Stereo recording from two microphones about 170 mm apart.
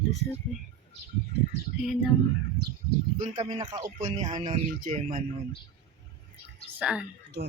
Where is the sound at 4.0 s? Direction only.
45° right (ahead or behind).